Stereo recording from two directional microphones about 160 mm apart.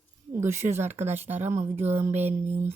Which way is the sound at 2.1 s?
45° right (ahead or behind).